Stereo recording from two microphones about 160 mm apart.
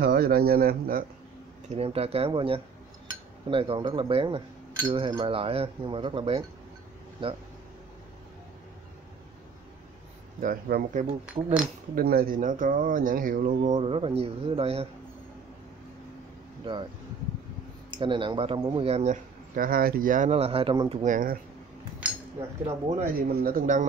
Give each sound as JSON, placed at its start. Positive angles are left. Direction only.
{"t": 0.0, "sound": "speech", "side_deg": -75}
{"t": 1.7, "sound": "speech", "side_deg": -40}
{"t": 10.4, "sound": "speech", "side_deg": -60}
{"t": 11.4, "sound": "speech", "side_deg": -40}
{"t": 11.9, "sound": "speech", "side_deg": -70}
{"t": 17.9, "sound": "speech", "side_deg": -30}
{"t": 18.9, "sound": "speech", "side_deg": -40}
{"t": 19.5, "sound": "speech", "side_deg": -60}
{"t": 20.2, "sound": "speech", "side_deg": -40}
{"t": 20.9, "sound": "speech", "side_deg": -50}
{"t": 22.7, "sound": "speech", "side_deg": -40}
{"t": 23.0, "sound": "speech", "side_deg": -65}